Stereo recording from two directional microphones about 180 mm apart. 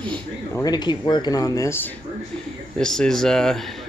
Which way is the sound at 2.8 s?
5° left (ahead or behind).